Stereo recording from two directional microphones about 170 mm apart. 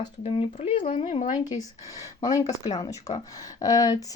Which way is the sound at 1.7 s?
20° left (ahead or behind).